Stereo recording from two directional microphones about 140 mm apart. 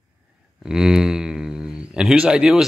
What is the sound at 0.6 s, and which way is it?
A man's voice, 5° right (ahead or behind).